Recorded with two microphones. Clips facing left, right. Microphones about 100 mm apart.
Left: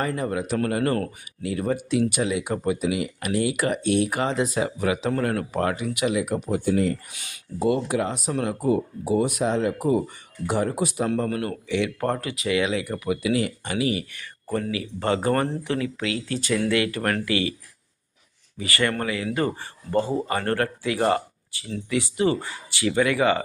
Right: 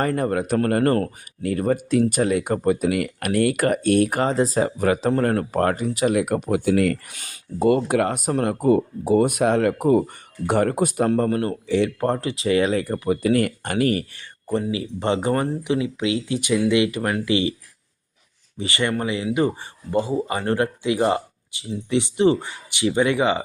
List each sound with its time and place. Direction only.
0.0 s speech: 50° right (ahead or behind)
6.1 s speech: 55° right (ahead or behind)
7.2 s speech: 50° right (ahead or behind)
14.2 s speech: 20° right (ahead or behind)
17.2 s speech: 25° right (ahead or behind)
18.5 s speech: 25° right (ahead or behind)